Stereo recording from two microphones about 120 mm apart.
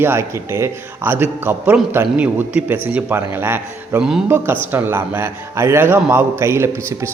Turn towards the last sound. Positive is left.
turn(degrees=-20)  # may be behind; listen again after turning